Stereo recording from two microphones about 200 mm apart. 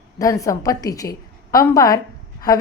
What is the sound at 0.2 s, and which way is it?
A woman's voice, 15° left (ahead or behind).